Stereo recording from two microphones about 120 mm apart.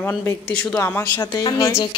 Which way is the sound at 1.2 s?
30° left (ahead or behind).